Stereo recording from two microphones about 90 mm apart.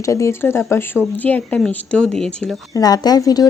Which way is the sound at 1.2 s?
20° left (ahead or behind).